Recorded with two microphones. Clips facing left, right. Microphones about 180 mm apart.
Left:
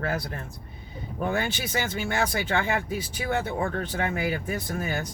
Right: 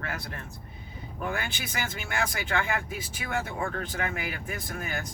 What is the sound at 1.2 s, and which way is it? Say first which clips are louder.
Speech: left 6 dB; 30° left (ahead or behind).